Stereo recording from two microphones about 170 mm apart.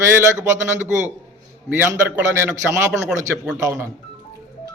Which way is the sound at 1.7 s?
15° right (ahead or behind).